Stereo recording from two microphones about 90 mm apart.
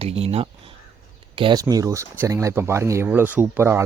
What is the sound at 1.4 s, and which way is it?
Speech, 70° right (ahead or behind).